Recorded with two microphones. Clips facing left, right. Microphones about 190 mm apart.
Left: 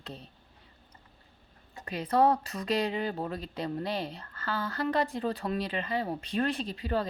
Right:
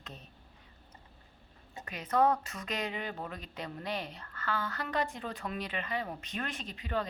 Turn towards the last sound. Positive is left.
turn(degrees=35)  # may be behind; listen again after turning